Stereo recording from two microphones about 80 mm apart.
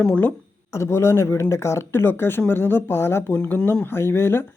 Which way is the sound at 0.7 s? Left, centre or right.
Left.